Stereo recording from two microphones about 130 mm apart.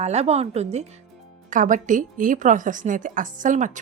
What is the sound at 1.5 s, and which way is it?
A woman's voice, 80° right.